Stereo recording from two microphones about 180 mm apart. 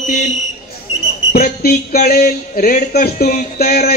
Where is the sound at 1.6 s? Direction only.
60° left (ahead or behind).